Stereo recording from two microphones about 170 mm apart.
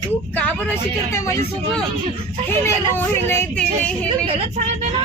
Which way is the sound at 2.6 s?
15° left (ahead or behind).